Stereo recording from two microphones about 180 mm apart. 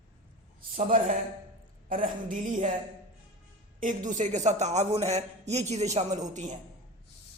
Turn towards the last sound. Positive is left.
turn(degrees=-40)  # may be behind; listen again after turning